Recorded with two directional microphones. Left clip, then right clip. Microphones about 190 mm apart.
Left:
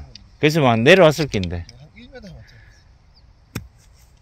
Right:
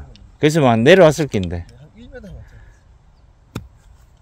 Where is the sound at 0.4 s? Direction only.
20° right (ahead or behind).